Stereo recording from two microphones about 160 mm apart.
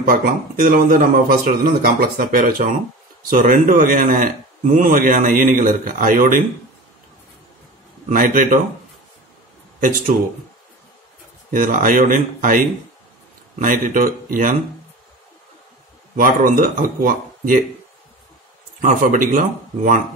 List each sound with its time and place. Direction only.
0.0 s a man's voice: 60° right (ahead or behind)
8.1 s a man's voice: 55° right (ahead or behind)
9.8 s speech: 60° right (ahead or behind)
11.5 s a man's voice: 55° right (ahead or behind)
16.2 s a man's voice: 60° right (ahead or behind)
18.8 s a man's voice: 55° right (ahead or behind)